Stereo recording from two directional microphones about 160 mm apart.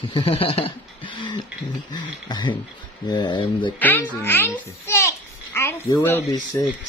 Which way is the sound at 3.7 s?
10° left (ahead or behind).